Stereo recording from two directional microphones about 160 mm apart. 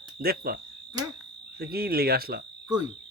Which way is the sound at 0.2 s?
70° right (ahead or behind).